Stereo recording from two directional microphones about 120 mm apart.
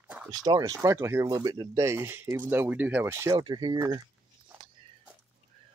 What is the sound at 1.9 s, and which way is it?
Speech, 20° right (ahead or behind).